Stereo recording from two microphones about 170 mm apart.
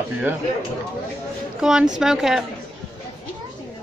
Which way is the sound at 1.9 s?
Centre (ahead or behind).